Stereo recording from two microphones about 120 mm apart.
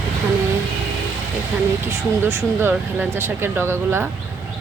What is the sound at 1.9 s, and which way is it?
Speech, 20° right (ahead or behind).